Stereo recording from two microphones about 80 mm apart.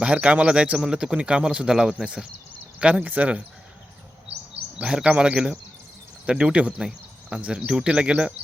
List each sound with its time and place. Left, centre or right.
0.0 s a man's voice: centre
4.8 s a man's voice: centre